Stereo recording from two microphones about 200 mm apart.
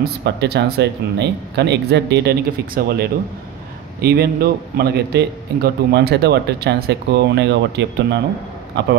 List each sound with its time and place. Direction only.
0.0 s a man's voice: 55° right (ahead or behind)